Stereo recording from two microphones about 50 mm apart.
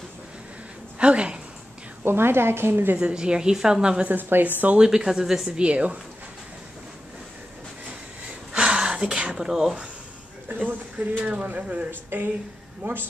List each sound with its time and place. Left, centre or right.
0.9 s a woman's voice: right
2.0 s a woman's voice: right
3.0 s a woman's voice: right
4.1 s a woman's voice: right
4.7 s a woman's voice: centre
5.6 s speech: right
8.5 s a sound: centre
9.5 s speech: centre
10.5 s speech: right
11.9 s a woman's voice: right